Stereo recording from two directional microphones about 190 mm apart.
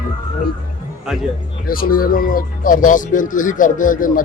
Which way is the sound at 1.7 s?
50° left (ahead or behind).